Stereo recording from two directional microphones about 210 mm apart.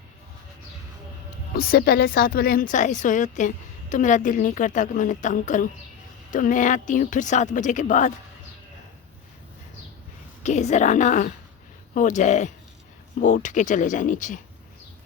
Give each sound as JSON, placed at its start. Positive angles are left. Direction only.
{"t": 1.5, "sound": "speech", "side_deg": 45}
{"t": 10.4, "sound": "speech", "side_deg": 35}